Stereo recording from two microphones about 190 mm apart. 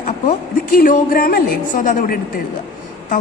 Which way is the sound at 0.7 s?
50° left (ahead or behind).